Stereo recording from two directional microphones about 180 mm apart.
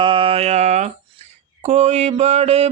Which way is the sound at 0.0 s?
30° right (ahead or behind).